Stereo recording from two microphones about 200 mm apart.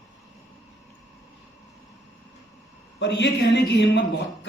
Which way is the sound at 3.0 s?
60° left (ahead or behind).